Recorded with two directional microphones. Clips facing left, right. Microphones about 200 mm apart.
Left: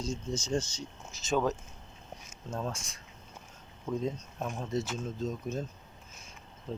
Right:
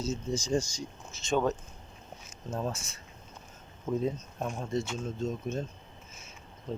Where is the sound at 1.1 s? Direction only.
5° left (ahead or behind).